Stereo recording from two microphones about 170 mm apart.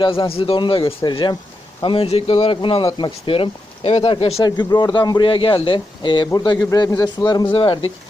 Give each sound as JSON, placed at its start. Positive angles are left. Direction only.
{"t": 0.0, "sound": "speech", "side_deg": 30}